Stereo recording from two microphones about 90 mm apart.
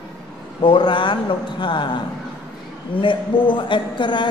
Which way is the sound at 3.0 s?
65° left (ahead or behind).